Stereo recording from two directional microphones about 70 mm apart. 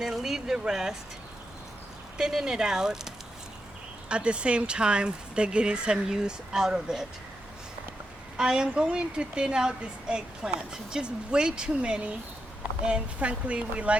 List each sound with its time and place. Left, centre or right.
0.0 s speech: centre
2.1 s a woman's voice: centre
4.1 s a woman's voice: centre
8.4 s a woman's voice: centre